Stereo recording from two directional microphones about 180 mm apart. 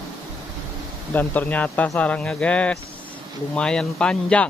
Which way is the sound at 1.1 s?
10° left (ahead or behind).